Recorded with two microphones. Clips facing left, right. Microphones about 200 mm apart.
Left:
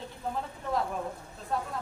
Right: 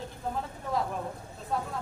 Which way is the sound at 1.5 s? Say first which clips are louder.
Even; centre (ahead or behind).